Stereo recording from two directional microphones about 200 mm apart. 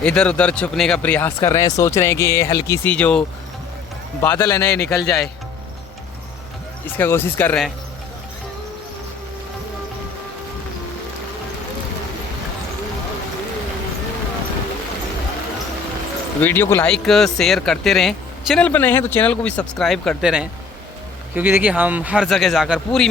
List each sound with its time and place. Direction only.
0.0 s speech: 5° left (ahead or behind)
4.9 s speech: centre (ahead or behind)
6.9 s speech: 10° left (ahead or behind)
16.4 s speech: 10° left (ahead or behind)